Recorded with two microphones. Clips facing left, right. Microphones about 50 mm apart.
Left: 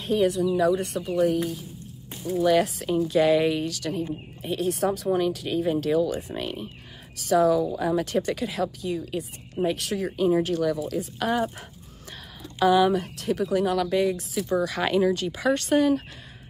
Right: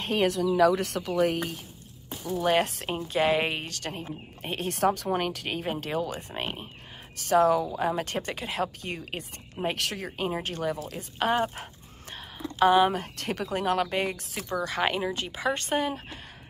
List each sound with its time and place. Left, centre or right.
0.0 s speech: right
0.6 s speech: right
2.4 s speech: right
3.0 s speech: right
8.8 s speech: right
10.0 s speech: right
12.9 s speech: right
14.7 s speech: right